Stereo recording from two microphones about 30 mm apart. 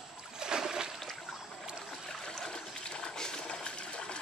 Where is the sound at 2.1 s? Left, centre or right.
Centre.